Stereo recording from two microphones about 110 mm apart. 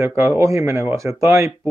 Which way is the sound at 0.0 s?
20° right (ahead or behind).